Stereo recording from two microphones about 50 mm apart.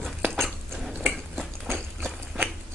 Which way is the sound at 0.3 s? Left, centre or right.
Centre.